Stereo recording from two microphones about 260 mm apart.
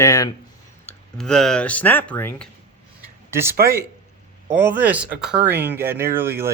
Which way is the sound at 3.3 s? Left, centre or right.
Centre.